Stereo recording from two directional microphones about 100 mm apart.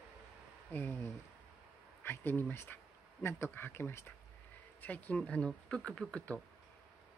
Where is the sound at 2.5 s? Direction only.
25° left (ahead or behind).